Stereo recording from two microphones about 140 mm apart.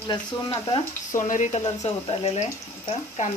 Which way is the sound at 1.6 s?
40° left (ahead or behind).